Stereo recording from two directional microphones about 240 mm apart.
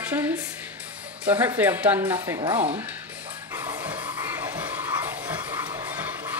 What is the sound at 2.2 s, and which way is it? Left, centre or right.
Speech, centre.